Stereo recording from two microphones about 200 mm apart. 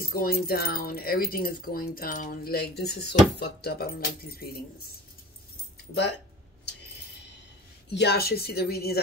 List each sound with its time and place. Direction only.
0.0 s speech: 50° left (ahead or behind)
7.9 s speech: 55° left (ahead or behind)